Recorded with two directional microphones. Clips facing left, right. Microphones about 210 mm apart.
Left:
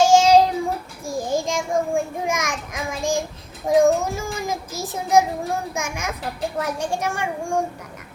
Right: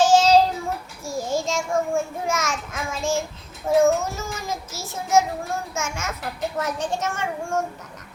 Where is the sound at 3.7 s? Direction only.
15° left (ahead or behind).